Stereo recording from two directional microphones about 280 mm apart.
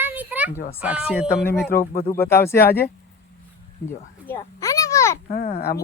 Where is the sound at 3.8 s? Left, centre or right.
Centre.